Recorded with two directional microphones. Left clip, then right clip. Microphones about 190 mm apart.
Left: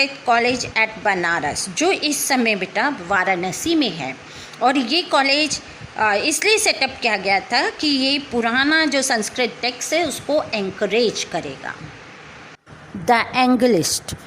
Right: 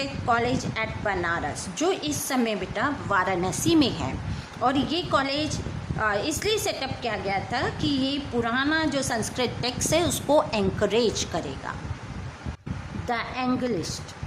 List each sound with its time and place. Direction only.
0.0 s a woman's voice: 15° left (ahead or behind)
9.4 s a woman's voice: 5° left (ahead or behind)
13.1 s a woman's voice: 35° left (ahead or behind)